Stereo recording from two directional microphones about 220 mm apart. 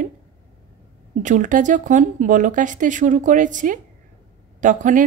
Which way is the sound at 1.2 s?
35° right (ahead or behind).